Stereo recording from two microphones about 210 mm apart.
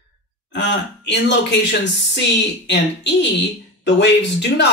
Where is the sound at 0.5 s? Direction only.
55° left (ahead or behind).